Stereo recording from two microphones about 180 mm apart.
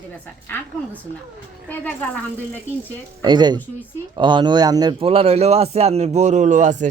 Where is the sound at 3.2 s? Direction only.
25° right (ahead or behind); by 6.8 s 45° right (ahead or behind).